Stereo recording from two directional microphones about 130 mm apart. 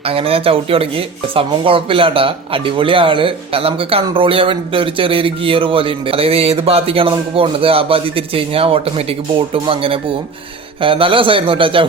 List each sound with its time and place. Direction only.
0.0 s speech: 45° right (ahead or behind)